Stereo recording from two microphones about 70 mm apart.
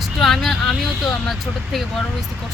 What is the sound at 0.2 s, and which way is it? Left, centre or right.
Vehicle, centre.